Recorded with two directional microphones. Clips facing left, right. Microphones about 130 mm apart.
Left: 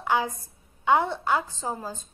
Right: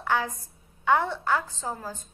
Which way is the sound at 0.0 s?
20° left (ahead or behind).